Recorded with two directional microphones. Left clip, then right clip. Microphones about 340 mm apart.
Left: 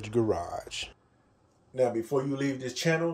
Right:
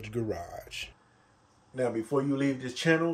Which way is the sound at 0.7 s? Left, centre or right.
Centre.